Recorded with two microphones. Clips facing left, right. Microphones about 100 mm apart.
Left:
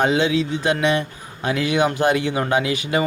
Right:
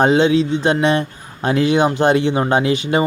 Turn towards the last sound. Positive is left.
turn(degrees=-30)  # may be behind; listen again after turning